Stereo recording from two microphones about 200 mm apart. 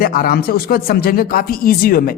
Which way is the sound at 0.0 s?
45° left (ahead or behind).